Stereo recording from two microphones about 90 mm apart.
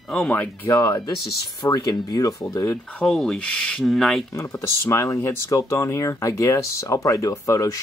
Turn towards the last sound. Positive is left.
turn(degrees=35)  # may be behind; listen again after turning